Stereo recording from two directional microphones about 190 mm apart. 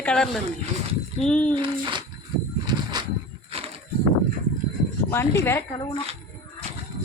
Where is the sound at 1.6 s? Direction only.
25° right (ahead or behind).